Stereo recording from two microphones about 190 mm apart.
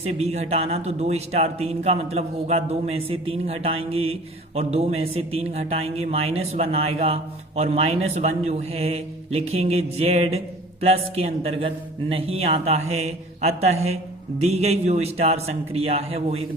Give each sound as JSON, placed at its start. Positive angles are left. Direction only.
{"t": 0.0, "sound": "speech", "side_deg": -35}